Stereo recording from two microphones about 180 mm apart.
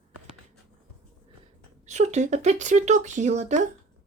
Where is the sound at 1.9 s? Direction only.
40° right (ahead or behind).